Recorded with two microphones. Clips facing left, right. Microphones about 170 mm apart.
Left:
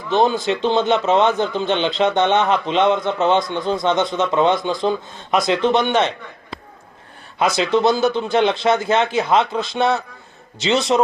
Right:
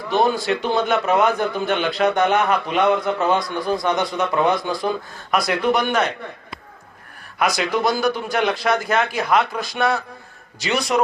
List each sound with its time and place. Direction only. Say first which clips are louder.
0.1 s a man's voice: left 2 dB; 20° left (ahead or behind)
7.3 s a man's voice: left 3 dB; 25° left (ahead or behind)